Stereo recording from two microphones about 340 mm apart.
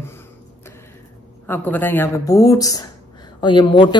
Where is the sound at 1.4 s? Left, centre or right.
Centre.